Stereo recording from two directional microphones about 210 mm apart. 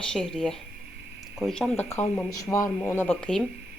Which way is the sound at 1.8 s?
30° left (ahead or behind).